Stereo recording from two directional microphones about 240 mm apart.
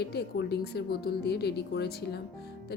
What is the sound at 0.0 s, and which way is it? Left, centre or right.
Speech, left.